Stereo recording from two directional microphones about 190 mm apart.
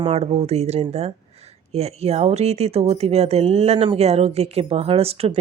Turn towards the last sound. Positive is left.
turn(degrees=-30)  # may be behind; listen again after turning